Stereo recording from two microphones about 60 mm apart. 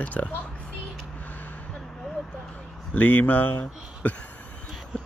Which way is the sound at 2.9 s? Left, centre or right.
Left.